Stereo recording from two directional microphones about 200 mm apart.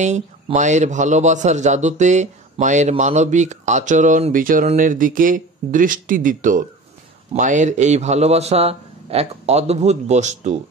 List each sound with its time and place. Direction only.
0.0 s a man's voice: 35° right (ahead or behind)